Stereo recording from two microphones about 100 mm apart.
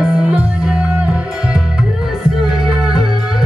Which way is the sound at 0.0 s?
10° right (ahead or behind).